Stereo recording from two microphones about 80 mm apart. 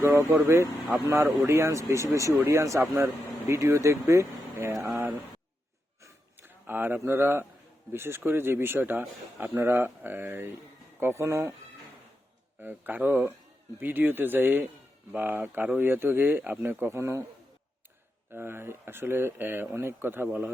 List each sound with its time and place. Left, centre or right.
0.0 s speech: right
6.0 s a sound: right
7.9 s speech: right
12.5 s speech: right
18.3 s speech: right